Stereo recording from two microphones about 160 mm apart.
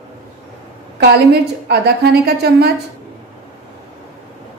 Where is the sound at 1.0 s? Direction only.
90° right.